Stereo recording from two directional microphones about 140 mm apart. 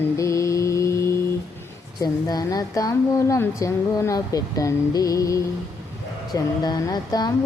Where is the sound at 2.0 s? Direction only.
30° left (ahead or behind).